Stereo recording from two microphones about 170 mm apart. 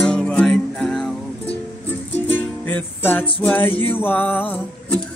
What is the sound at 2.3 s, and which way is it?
Music, 10° left (ahead or behind).